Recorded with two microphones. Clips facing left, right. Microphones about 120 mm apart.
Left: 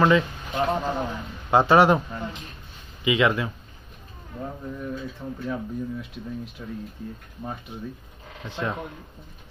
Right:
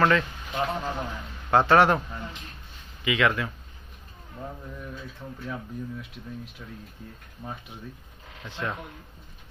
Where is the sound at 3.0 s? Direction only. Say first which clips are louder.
Left 3 dB; 20° left (ahead or behind).